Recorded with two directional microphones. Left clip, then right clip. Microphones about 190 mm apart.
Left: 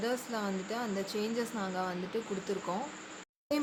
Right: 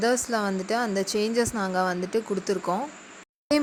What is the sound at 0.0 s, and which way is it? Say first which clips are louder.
A woman's voice: right 10 dB; 35° right (ahead or behind).